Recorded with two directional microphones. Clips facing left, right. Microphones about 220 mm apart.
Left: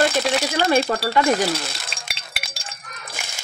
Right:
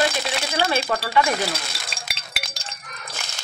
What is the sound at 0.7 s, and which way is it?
Speech, 45° left (ahead or behind).